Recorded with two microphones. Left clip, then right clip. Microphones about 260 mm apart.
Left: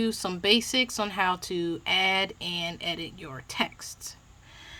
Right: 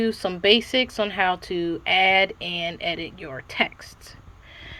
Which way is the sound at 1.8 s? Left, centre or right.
Left.